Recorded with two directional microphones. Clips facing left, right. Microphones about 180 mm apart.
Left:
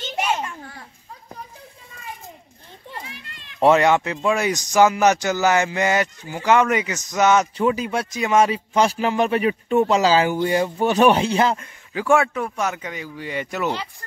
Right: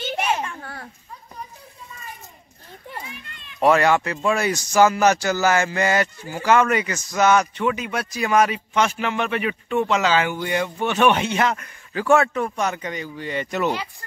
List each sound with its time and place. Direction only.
3.1 s a sound: 85° left
3.6 s speech: 20° left (ahead or behind)
7.5 s a man's voice: 35° left (ahead or behind)
11.9 s speech: 10° left (ahead or behind)